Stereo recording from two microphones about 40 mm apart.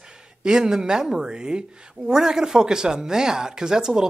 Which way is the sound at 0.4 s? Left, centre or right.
Centre.